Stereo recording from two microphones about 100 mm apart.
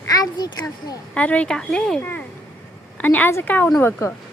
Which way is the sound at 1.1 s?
15° left (ahead or behind).